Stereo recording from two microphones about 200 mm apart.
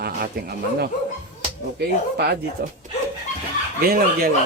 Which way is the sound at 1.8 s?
55° right (ahead or behind).